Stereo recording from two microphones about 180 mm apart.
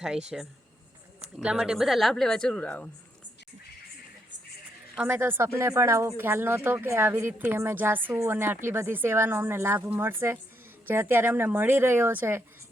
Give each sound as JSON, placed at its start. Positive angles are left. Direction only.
{"t": 0.0, "sound": "speech", "side_deg": -5}
{"t": 4.9, "sound": "speech", "side_deg": -10}